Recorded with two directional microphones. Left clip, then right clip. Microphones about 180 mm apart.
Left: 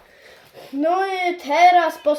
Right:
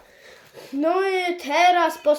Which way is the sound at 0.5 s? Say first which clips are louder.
Left 2 dB; 40° right (ahead or behind).